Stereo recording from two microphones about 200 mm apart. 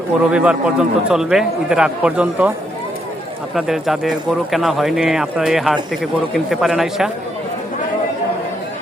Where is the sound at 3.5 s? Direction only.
Centre (ahead or behind).